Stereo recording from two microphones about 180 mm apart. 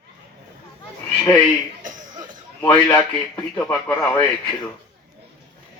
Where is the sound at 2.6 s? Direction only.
20° left (ahead or behind).